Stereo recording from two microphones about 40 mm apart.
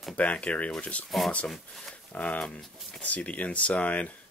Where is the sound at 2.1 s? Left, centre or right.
Left.